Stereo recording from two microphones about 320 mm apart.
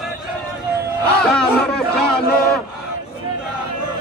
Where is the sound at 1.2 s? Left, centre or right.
Centre.